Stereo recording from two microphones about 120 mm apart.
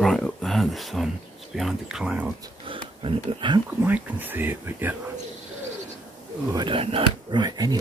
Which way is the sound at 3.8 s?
15° right (ahead or behind).